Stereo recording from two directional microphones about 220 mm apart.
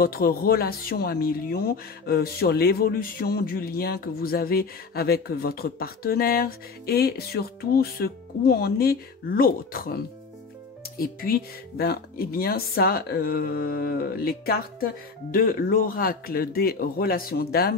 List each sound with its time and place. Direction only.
0.0 s speech: 40° left (ahead or behind)